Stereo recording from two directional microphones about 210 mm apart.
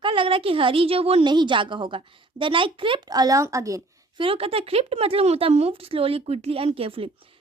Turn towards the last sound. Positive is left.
turn(degrees=-25)  # may be behind; listen again after turning